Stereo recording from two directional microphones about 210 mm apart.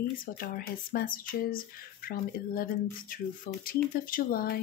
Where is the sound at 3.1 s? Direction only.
40° left (ahead or behind).